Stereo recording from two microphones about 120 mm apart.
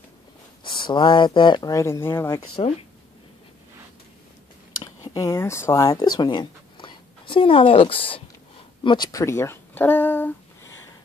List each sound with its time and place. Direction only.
0.7 s speech: 40° left (ahead or behind)
1.7 s speech: 25° left (ahead or behind)
4.8 s speech: 25° left (ahead or behind); by 8.2 s 50° left (ahead or behind)
8.8 s speech: 40° left (ahead or behind)
9.2 s speech: 20° left (ahead or behind)